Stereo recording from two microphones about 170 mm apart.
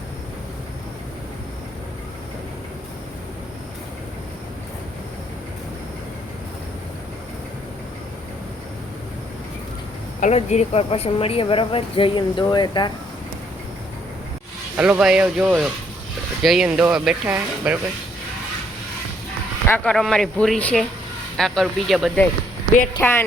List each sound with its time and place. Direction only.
10.2 s speech: 45° left (ahead or behind); by 12.9 s 25° left (ahead or behind)
14.8 s speech: 5° right (ahead or behind)
19.6 s speech: 10° left (ahead or behind)